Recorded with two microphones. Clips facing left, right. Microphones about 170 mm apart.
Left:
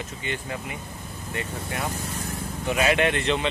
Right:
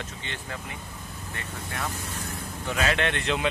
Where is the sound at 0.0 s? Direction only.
10° left (ahead or behind).